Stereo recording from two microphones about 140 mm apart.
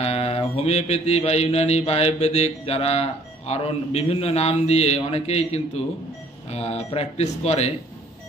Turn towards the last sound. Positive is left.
turn(degrees=50)  # may be behind; listen again after turning